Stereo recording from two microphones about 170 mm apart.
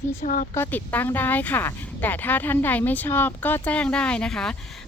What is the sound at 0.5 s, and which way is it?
A woman's voice, 10° left (ahead or behind).